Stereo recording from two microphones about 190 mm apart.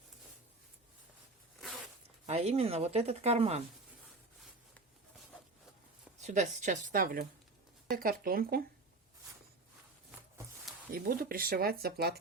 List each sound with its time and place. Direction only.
2.2 s speech: 35° right (ahead or behind)
6.1 s speech: 40° right (ahead or behind)
10.9 s speech: 50° right (ahead or behind)